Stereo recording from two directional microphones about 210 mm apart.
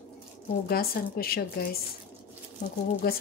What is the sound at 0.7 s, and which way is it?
A woman's voice, 45° left (ahead or behind).